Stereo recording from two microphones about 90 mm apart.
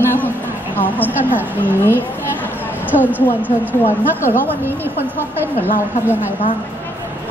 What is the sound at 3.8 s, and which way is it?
Speech, 25° left (ahead or behind).